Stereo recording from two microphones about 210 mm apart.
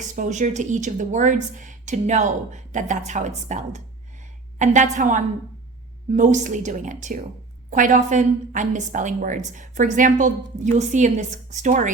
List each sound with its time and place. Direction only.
0.0 s a woman's voice: 35° right (ahead or behind)